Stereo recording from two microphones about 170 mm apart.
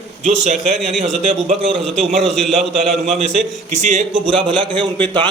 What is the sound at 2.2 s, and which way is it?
A man's voice, centre (ahead or behind).